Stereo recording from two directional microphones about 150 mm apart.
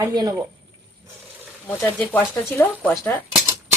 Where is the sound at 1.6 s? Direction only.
10° left (ahead or behind).